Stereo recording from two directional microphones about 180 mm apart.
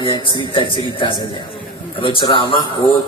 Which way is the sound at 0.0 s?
30° left (ahead or behind).